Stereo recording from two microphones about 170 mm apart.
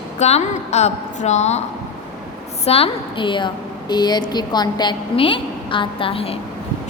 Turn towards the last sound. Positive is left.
turn(degrees=30)  # may be behind; listen again after turning